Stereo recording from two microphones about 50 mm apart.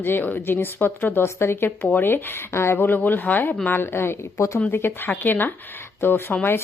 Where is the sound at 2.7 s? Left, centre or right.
Left.